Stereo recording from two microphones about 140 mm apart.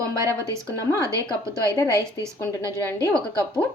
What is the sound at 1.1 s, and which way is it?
Speech, 25° right (ahead or behind).